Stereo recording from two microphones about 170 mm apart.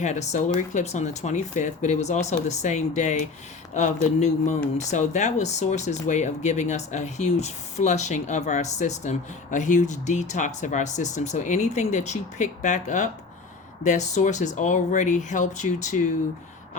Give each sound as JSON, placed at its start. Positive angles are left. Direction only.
{"t": 0.0, "sound": "speech", "side_deg": 40}